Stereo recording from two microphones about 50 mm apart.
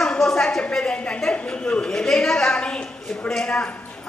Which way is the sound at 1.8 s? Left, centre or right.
Centre.